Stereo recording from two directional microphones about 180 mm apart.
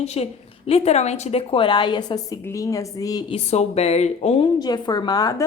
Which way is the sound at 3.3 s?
35° left (ahead or behind).